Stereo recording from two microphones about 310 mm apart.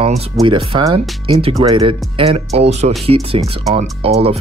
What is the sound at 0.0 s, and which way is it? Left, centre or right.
Speech, centre.